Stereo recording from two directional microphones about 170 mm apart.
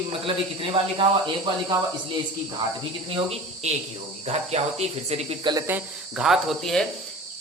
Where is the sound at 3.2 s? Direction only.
35° right (ahead or behind).